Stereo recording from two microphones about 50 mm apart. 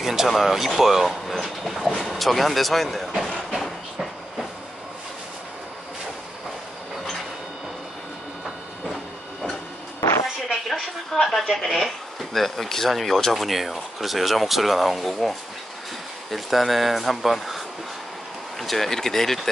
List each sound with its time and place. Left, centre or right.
0.0 s speech: centre
3.4 s train: centre
9.9 s a sound: left
10.5 s speech: centre